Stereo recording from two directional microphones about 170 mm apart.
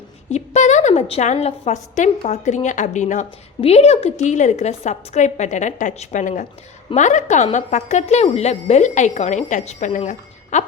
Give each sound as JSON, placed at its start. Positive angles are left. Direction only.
{"t": 0.3, "sound": "a woman's voice", "side_deg": 40}